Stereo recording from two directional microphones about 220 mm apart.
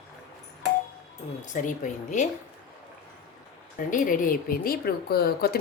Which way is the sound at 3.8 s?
35° left (ahead or behind).